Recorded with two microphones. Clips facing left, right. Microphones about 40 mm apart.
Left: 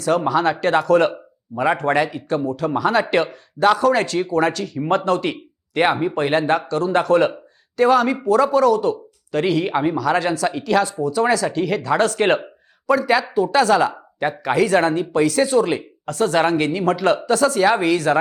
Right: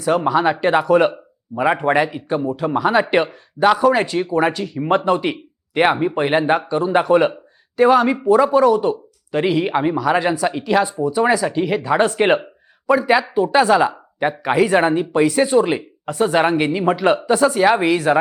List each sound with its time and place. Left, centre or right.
0.0 s speech: centre